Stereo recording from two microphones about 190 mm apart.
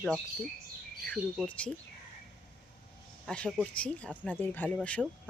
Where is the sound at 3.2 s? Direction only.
5° left (ahead or behind).